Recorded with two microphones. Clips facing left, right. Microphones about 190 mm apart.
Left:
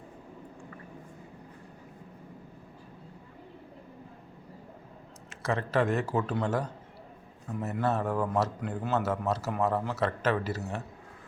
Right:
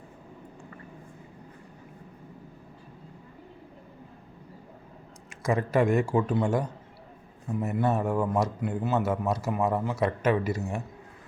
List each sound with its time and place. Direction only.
5.4 s a man's voice: 15° right (ahead or behind)